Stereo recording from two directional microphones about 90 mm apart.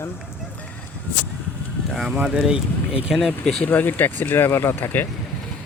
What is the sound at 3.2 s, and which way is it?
Speech, 5° left (ahead or behind).